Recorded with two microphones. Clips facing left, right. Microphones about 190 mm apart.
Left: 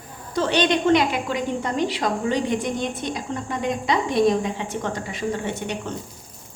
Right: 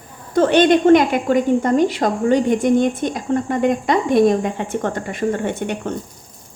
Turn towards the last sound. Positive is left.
turn(degrees=-55)  # may be behind; listen again after turning